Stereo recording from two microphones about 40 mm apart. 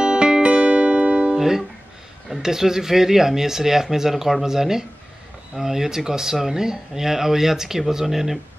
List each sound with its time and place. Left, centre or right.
0.0 s music: centre
1.3 s music: centre
2.2 s speech: centre